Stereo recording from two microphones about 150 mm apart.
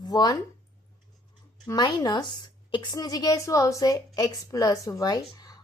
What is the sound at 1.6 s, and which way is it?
A woman's voice, 30° left (ahead or behind).